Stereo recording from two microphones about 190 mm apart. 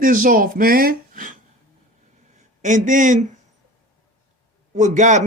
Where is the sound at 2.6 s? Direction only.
40° right (ahead or behind).